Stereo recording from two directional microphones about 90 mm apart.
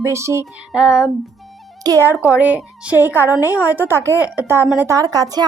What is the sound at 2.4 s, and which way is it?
A woman's voice, 15° right (ahead or behind).